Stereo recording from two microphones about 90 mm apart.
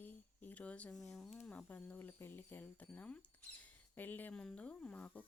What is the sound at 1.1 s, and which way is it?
Speech, centre (ahead or behind).